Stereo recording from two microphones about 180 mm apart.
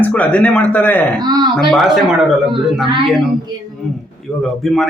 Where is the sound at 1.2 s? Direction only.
25° right (ahead or behind).